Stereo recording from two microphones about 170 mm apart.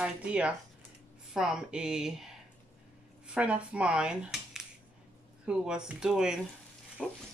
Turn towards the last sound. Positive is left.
turn(degrees=0)  # may be behind; listen again after turning